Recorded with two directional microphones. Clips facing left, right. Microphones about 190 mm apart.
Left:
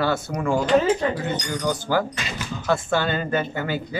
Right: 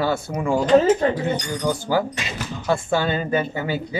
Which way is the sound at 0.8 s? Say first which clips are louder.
Right 5 dB; 45° right (ahead or behind).